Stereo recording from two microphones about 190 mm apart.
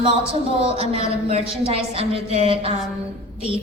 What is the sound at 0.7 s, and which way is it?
A woman's voice, 30° right (ahead or behind).